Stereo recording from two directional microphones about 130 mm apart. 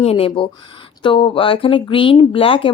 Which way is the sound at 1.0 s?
40° left (ahead or behind).